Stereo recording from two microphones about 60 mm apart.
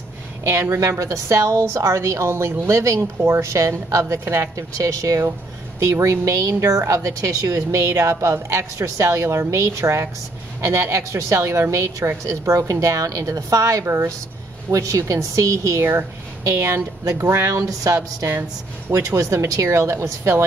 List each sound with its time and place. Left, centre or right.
0.5 s a woman's voice: right
2.6 s a woman's voice: right
4.7 s a woman's voice: right
5.8 s a woman's voice: right
13.8 s a woman's voice: right
14.7 s a woman's voice: right
17.3 s a woman's voice: right
17.6 s a woman's voice: right
18.9 s a woman's voice: right